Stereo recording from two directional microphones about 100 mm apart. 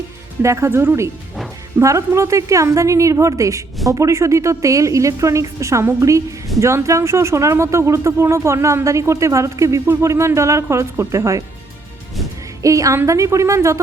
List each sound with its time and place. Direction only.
0.4 s speech: 30° right (ahead or behind)
12.6 s speech: 35° right (ahead or behind)